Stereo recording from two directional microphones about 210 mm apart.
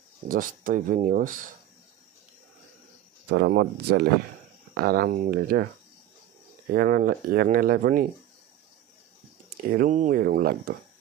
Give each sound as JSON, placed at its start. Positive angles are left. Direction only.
{"t": 0.3, "sound": "speech", "side_deg": -40}
{"t": 3.3, "sound": "speech", "side_deg": -50}
{"t": 6.7, "sound": "speech", "side_deg": -45}
{"t": 9.6, "sound": "speech", "side_deg": -45}